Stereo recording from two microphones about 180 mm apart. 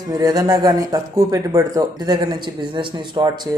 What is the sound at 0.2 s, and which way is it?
Speech, 20° right (ahead or behind).